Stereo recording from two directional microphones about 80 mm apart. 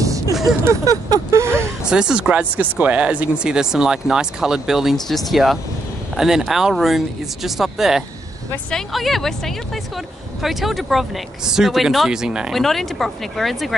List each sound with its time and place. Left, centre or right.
0.0 s a sound: right
0.7 s vehicle: right
1.9 s speech: centre
12.5 s speech: centre